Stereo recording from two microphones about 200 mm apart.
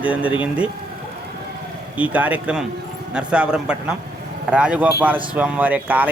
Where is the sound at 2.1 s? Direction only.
5° right (ahead or behind).